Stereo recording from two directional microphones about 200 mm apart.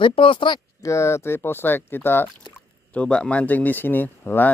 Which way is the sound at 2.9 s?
5° left (ahead or behind).